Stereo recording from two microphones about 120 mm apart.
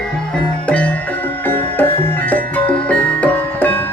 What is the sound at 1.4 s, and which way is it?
Music, 15° left (ahead or behind).